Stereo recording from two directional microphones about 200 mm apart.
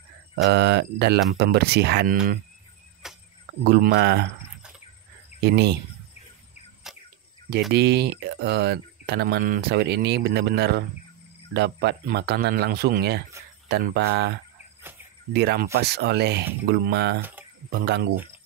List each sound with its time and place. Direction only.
0.5 s speech: 55° right (ahead or behind)
3.0 s a sound: 5° right (ahead or behind)
3.6 s speech: 50° right (ahead or behind)
5.4 s speech: 55° right (ahead or behind)
7.7 s speech: 55° right (ahead or behind)
15.3 s speech: 55° right (ahead or behind)